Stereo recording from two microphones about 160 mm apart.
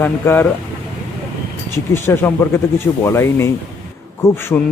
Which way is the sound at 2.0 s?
15° left (ahead or behind).